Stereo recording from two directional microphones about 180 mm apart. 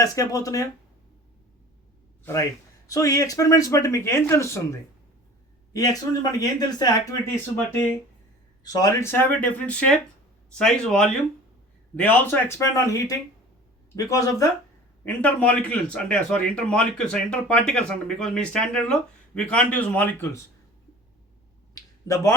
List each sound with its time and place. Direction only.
0.0 s speech: 20° left (ahead or behind)
2.2 s a man's voice: 20° left (ahead or behind)
7.5 s a man's voice: 10° left (ahead or behind)
15.0 s a man's voice: 10° left (ahead or behind)
22.0 s speech: 15° left (ahead or behind)